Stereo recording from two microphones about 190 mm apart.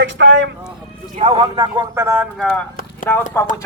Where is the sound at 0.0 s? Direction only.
70° right (ahead or behind).